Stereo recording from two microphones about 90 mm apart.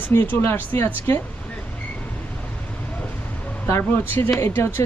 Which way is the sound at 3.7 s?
25° left (ahead or behind).